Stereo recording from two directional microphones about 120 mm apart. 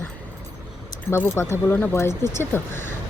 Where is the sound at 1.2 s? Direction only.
20° left (ahead or behind).